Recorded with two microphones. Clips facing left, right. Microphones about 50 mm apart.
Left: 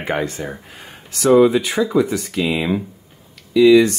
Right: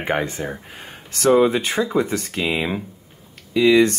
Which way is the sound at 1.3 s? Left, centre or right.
Right.